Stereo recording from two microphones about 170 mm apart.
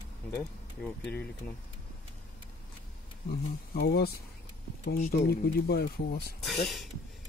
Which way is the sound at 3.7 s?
70° left (ahead or behind).